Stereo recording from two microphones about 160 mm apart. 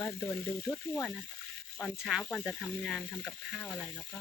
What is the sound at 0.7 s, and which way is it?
Speech, 5° left (ahead or behind).